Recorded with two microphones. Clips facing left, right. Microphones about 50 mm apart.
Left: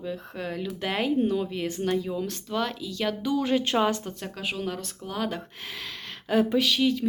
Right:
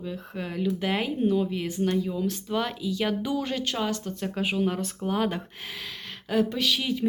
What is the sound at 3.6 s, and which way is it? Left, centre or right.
Speech, left.